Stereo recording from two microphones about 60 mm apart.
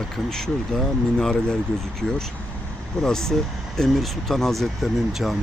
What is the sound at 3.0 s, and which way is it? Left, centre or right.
Speech, centre.